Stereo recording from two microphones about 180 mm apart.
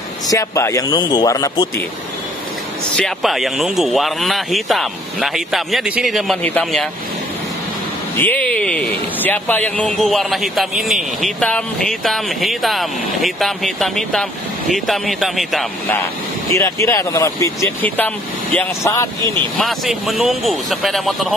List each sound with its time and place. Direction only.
0.3 s speech: 15° left (ahead or behind)
3.0 s a man's voice: centre (ahead or behind)
8.2 s a sound: 10° left (ahead or behind)
9.2 s a man's voice: 10° left (ahead or behind)
16.5 s speech: 15° left (ahead or behind)
19.6 s a man's voice: centre (ahead or behind)